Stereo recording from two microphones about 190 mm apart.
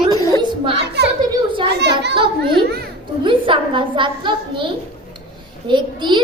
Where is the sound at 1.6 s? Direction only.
60° right (ahead or behind).